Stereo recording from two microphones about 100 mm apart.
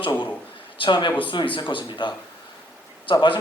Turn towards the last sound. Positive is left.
turn(degrees=55)  # may be behind; listen again after turning